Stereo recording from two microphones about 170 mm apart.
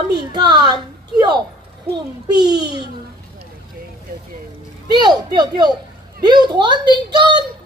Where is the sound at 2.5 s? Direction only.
25° right (ahead or behind).